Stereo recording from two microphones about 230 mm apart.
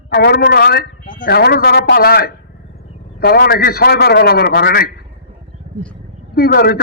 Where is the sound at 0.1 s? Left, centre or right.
Left.